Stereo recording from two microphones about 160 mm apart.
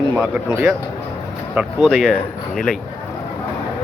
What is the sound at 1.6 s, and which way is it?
Speech, centre (ahead or behind).